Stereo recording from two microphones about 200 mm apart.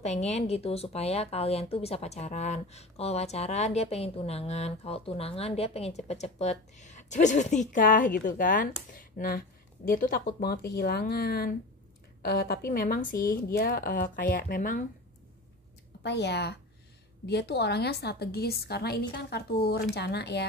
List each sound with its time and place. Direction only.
0.0 s speech: 35° left (ahead or behind)
16.0 s a woman's voice: 60° left (ahead or behind)